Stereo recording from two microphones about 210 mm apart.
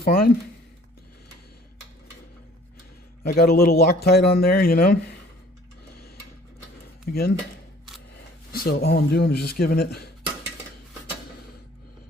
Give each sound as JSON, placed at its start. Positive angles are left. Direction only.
{"t": 0.0, "sound": "speech", "side_deg": 45}
{"t": 3.2, "sound": "a man's voice", "side_deg": 45}
{"t": 7.1, "sound": "a man's voice", "side_deg": 50}
{"t": 8.5, "sound": "a man's voice", "side_deg": 45}